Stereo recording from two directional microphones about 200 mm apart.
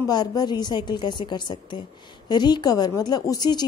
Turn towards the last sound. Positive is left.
turn(degrees=20)  # may be behind; listen again after turning